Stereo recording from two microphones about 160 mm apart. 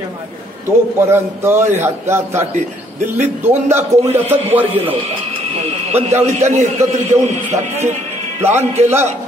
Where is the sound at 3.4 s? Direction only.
15° right (ahead or behind).